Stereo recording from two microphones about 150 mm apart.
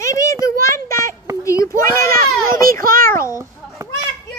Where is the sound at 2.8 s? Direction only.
70° right (ahead or behind).